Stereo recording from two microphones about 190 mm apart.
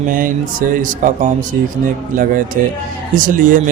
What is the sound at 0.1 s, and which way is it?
A man's voice, 45° right (ahead or behind).